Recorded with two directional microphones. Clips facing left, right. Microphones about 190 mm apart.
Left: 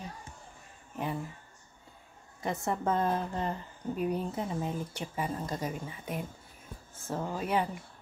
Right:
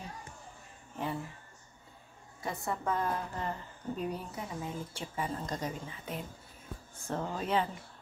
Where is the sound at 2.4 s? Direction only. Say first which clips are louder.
Left 4 dB; 20° left (ahead or behind).